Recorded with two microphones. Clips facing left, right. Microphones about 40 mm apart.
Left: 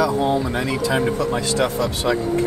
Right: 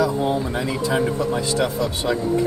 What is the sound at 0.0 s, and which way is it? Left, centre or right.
Speech, left.